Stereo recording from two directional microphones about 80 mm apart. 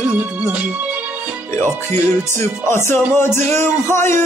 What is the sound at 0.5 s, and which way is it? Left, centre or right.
Speech, right.